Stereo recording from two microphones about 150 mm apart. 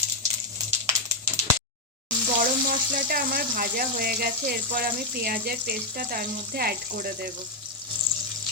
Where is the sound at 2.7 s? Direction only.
70° right (ahead or behind).